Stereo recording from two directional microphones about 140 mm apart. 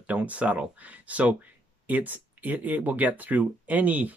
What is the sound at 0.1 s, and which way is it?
Speech, 10° right (ahead or behind).